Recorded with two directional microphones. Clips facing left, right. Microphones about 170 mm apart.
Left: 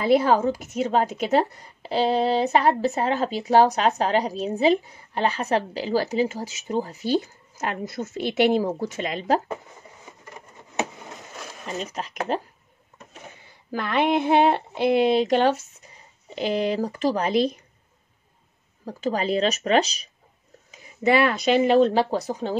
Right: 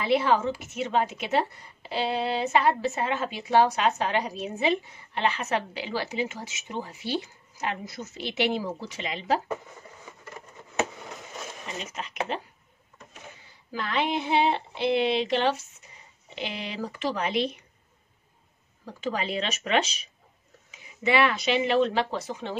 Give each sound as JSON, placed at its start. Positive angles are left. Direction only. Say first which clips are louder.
{"t": 0.0, "sound": "a woman's voice", "louder": "left 5 dB", "side_deg": 40}
{"t": 11.6, "sound": "a woman's voice", "louder": "left 8 dB", "side_deg": 40}
{"t": 13.7, "sound": "a woman's voice", "louder": "left 6 dB", "side_deg": 55}
{"t": 18.9, "sound": "a woman's voice", "louder": "left 6 dB", "side_deg": 40}